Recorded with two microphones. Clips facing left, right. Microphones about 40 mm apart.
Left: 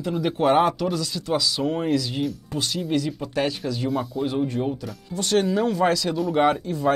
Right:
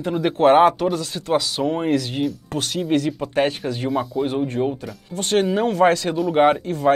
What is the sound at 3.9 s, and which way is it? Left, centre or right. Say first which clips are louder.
Speech: right 5 dB; centre.